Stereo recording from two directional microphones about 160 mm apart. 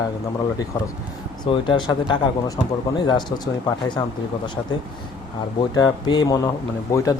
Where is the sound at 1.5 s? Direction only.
30° left (ahead or behind).